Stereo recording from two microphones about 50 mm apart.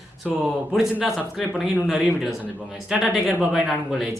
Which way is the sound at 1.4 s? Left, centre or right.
Centre.